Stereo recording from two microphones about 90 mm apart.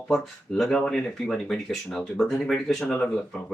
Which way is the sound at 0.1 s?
5° left (ahead or behind).